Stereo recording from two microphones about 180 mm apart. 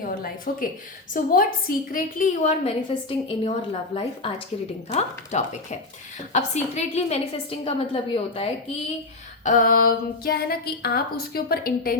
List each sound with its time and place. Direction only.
0.0 s a woman's voice: 55° left (ahead or behind)
2.9 s a woman's voice: 25° left (ahead or behind)
9.4 s speech: 45° left (ahead or behind)